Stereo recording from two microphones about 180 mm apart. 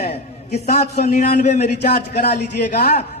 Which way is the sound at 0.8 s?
40° left (ahead or behind).